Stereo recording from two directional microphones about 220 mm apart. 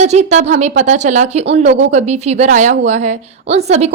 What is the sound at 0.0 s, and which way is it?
A woman's voice, 30° right (ahead or behind).